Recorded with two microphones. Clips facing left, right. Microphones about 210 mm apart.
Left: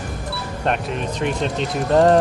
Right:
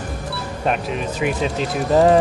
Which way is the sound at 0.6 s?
5° right (ahead or behind).